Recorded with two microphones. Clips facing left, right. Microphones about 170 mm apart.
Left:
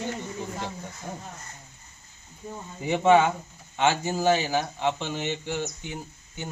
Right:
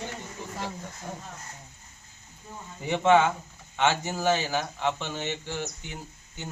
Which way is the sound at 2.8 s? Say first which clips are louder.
Left 2 dB; 10° left (ahead or behind).